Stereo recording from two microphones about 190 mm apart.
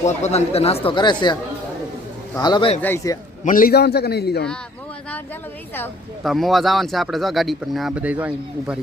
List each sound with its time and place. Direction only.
0.0 s a man's voice: 35° left (ahead or behind)
2.8 s a man's voice: 15° left (ahead or behind)
3.4 s a man's voice: 45° left (ahead or behind)
6.2 s speech: centre (ahead or behind)